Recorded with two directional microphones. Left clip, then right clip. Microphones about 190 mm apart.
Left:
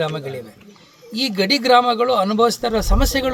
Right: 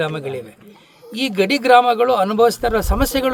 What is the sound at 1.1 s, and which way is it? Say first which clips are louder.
Speech: right 1 dB; 35° right (ahead or behind).